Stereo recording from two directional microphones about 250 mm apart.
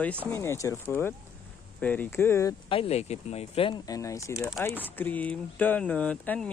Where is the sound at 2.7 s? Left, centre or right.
Left.